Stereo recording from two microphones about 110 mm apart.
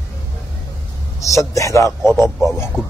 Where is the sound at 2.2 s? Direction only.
5° right (ahead or behind).